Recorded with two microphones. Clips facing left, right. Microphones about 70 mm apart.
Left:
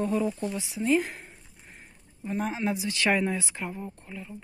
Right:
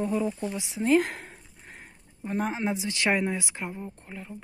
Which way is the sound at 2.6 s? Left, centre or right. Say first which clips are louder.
Even; right.